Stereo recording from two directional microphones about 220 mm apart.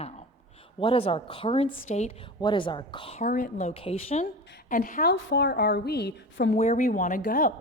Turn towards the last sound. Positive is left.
turn(degrees=40)  # may be behind; listen again after turning